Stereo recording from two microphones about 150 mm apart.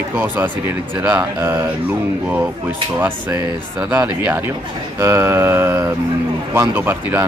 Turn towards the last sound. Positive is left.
turn(degrees=-15)  # may be behind; listen again after turning